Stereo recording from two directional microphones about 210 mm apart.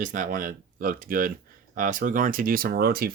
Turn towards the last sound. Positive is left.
turn(degrees=-45)  # may be behind; listen again after turning